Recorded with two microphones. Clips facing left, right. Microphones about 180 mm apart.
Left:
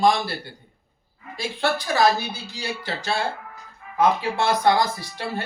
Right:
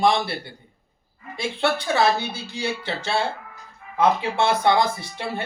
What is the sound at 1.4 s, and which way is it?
Speech, 25° right (ahead or behind).